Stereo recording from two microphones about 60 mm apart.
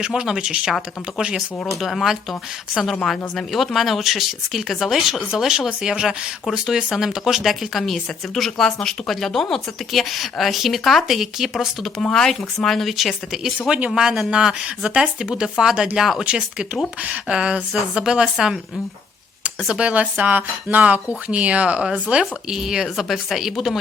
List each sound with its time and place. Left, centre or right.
0.0 s speech: centre
1.8 s speech: centre
12.1 s speech: centre
13.7 s speech: centre
19.8 s speech: right
22.1 s speech: centre